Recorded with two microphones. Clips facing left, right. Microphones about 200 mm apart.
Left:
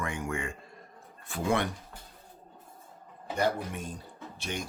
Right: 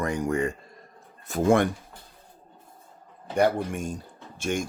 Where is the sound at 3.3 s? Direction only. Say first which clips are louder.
Right 7 dB; 55° right (ahead or behind).